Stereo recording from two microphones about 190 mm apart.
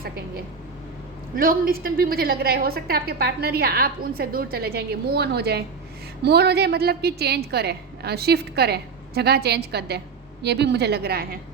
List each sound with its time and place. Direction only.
1.4 s a woman's voice: 50° right (ahead or behind)